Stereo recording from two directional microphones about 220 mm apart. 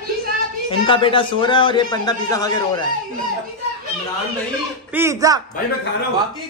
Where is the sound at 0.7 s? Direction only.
25° left (ahead or behind).